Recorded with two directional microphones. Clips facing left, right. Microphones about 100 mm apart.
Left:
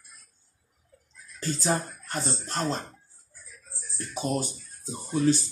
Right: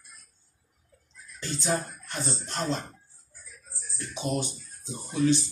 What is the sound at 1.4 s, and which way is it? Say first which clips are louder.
Speech: left 2 dB; 40° left (ahead or behind).